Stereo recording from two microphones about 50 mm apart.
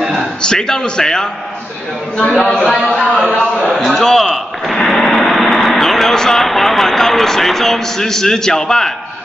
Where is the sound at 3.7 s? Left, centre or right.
Centre.